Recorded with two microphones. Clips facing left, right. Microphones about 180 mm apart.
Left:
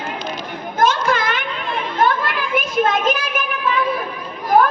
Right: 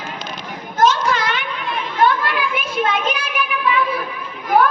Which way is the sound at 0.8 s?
50° left (ahead or behind).